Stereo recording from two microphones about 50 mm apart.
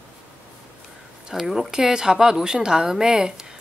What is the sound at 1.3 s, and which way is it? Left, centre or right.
A woman's voice, centre.